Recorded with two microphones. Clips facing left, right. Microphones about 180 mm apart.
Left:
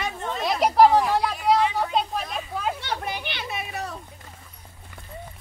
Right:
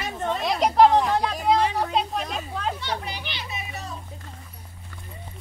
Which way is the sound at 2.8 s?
55° left (ahead or behind).